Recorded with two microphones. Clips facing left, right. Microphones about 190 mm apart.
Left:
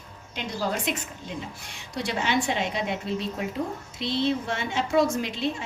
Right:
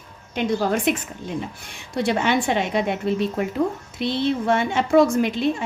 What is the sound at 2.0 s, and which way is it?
A woman's voice, 55° right (ahead or behind).